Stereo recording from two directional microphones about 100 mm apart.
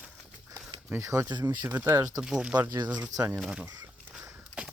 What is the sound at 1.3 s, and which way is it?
Speech, 45° right (ahead or behind).